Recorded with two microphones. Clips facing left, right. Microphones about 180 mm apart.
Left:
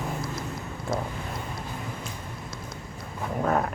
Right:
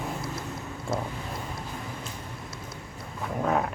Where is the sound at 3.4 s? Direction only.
Centre (ahead or behind).